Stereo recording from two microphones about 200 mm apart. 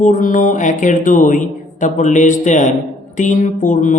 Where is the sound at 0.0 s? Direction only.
40° left (ahead or behind).